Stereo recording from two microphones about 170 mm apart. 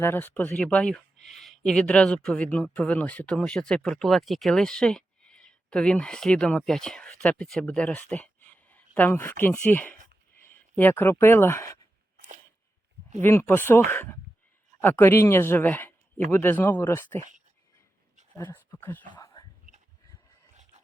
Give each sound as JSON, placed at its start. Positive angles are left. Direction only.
{"t": 0.0, "sound": "speech", "side_deg": 10}
{"t": 13.2, "sound": "speech", "side_deg": 15}
{"t": 17.2, "sound": "speech", "side_deg": -45}
{"t": 18.3, "sound": "speech", "side_deg": 15}
{"t": 19.0, "sound": "a sound", "side_deg": 25}